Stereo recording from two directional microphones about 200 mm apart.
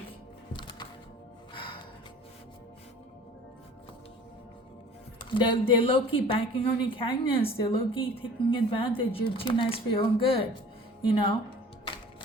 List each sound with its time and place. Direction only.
0.5 s music: 20° left (ahead or behind)
5.3 s a woman's voice: 25° left (ahead or behind)